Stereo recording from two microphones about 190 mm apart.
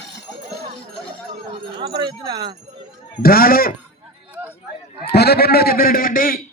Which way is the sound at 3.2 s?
50° left (ahead or behind).